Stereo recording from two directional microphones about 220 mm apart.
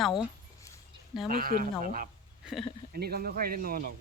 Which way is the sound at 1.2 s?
40° right (ahead or behind).